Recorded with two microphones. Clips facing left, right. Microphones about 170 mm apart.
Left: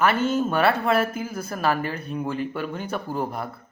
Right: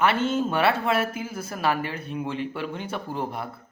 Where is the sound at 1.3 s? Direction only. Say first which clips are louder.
Left 3 dB; 5° right (ahead or behind).